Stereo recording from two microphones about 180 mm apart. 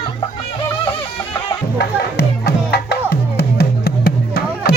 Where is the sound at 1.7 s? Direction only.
65° left (ahead or behind).